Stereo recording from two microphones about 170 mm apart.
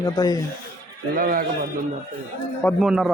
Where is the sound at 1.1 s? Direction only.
55° right (ahead or behind).